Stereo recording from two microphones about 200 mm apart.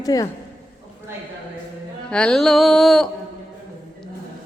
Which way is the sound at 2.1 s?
5° left (ahead or behind).